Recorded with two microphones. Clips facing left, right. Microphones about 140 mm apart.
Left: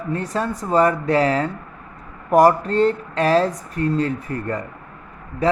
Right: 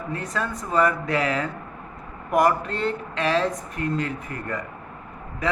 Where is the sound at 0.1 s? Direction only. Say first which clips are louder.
Left 6 dB; 30° left (ahead or behind).